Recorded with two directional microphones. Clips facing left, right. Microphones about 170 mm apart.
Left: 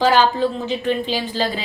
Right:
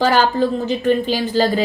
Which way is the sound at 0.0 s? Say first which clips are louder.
Right 1 dB; 50° right (ahead or behind).